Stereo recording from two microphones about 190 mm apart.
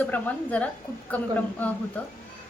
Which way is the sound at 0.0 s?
10° left (ahead or behind).